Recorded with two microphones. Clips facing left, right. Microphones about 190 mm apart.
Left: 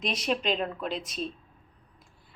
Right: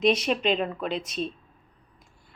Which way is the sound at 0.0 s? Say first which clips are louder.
Right 6 dB; centre (ahead or behind).